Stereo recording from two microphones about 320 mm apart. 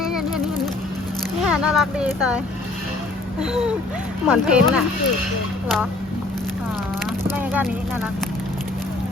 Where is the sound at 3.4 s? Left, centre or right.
Centre.